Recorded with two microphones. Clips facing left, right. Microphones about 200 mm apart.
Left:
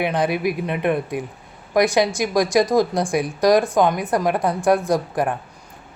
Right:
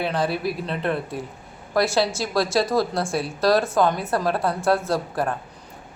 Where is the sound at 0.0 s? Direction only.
15° left (ahead or behind).